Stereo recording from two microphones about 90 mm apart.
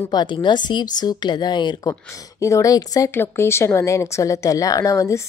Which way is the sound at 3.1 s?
25° left (ahead or behind).